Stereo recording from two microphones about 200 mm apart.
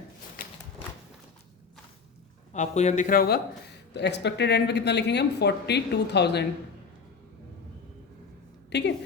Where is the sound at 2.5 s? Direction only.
35° left (ahead or behind).